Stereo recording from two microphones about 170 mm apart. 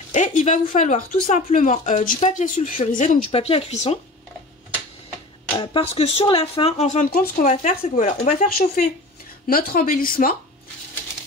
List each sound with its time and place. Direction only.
0.1 s speech: 45° left (ahead or behind)
3.3 s speech: 35° left (ahead or behind)
5.6 s speech: 30° left (ahead or behind)
8.5 s speech: 60° left (ahead or behind)